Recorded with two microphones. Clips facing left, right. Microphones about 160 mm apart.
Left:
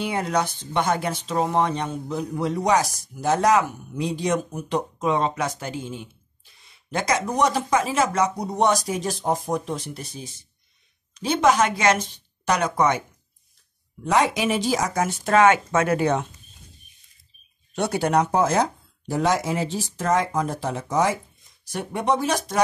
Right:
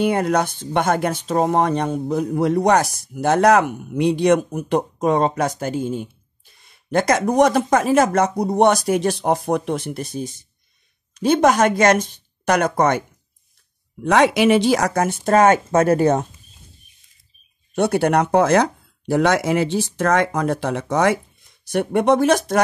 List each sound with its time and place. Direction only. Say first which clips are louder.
0.0 s speech: right 6 dB; 55° right (ahead or behind)
14.0 s speech: right 6 dB; 75° right (ahead or behind)
15.2 s speech: right 3 dB; 40° right (ahead or behind)
17.7 s speech: right 4 dB; 60° right (ahead or behind)